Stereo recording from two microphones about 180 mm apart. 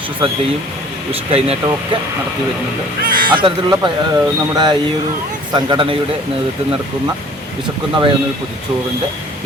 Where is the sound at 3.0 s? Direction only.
50° right (ahead or behind).